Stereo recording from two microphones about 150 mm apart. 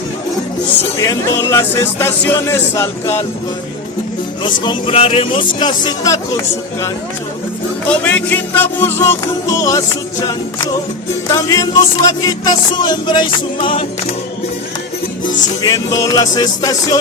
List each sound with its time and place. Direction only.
0.8 s speech: 20° left (ahead or behind)
4.4 s speech: 30° left (ahead or behind)
8.0 s speech: 10° left (ahead or behind)
11.3 s music: 20° left (ahead or behind)
15.6 s music: 25° left (ahead or behind)